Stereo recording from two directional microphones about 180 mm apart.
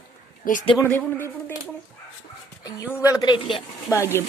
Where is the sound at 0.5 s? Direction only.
50° left (ahead or behind).